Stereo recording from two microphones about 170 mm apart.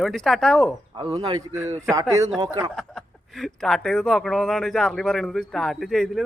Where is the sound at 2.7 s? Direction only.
Centre (ahead or behind).